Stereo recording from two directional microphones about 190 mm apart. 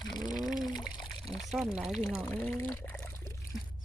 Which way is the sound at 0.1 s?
20° left (ahead or behind).